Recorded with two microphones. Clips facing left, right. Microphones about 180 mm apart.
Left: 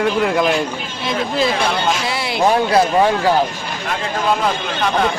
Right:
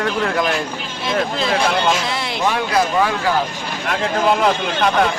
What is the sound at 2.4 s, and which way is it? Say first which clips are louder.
Speech: left 5 dB; 30° left (ahead or behind).